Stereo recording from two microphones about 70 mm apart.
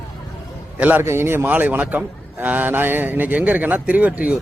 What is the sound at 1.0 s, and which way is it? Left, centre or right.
A man's voice, right.